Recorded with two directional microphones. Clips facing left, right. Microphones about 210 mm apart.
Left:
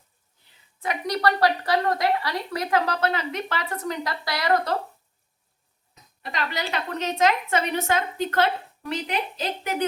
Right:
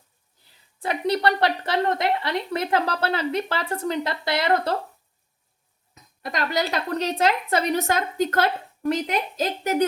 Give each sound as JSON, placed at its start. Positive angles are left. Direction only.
{"t": 0.8, "sound": "speech", "side_deg": -30}
{"t": 6.2, "sound": "a woman's voice", "side_deg": -45}